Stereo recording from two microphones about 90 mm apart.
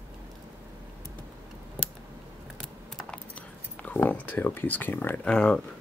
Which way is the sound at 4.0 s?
20° left (ahead or behind).